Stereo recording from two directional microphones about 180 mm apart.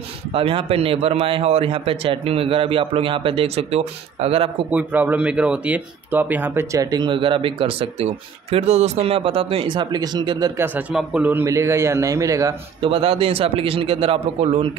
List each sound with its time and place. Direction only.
0.3 s a man's voice: 30° right (ahead or behind)
4.6 s speech: 10° right (ahead or behind); by 10.5 s 25° right (ahead or behind)
10.6 s a man's voice: 10° right (ahead or behind)
12.8 s a man's voice: 30° right (ahead or behind)